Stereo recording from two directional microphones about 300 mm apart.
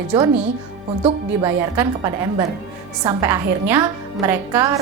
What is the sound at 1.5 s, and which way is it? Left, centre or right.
A woman's voice, centre.